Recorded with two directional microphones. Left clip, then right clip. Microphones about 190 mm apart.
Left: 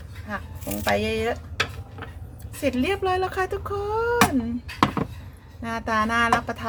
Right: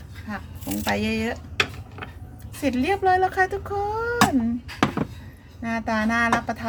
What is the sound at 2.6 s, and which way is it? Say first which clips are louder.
Speech: right 3 dB; 15° left (ahead or behind).